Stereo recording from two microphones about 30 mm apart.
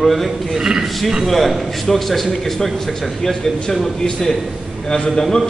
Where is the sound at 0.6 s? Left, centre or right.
Right.